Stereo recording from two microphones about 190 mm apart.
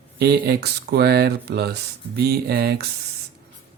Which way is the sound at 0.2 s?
60° right (ahead or behind).